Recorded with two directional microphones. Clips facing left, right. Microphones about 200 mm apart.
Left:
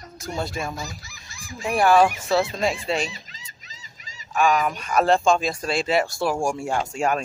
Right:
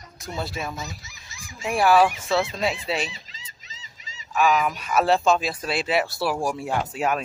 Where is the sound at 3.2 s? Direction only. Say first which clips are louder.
Even; 25° right (ahead or behind).